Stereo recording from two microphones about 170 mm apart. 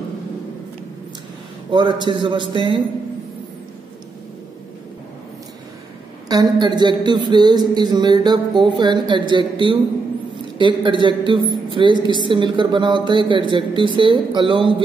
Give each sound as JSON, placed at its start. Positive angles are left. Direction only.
{"t": 1.7, "sound": "a woman's voice", "side_deg": -25}
{"t": 6.2, "sound": "a woman's voice", "side_deg": -25}